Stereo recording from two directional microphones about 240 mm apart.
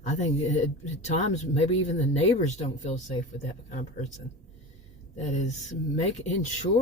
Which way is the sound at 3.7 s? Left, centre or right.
Left.